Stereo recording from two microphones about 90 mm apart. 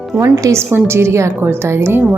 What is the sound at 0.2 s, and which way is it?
A woman's voice, 30° right (ahead or behind).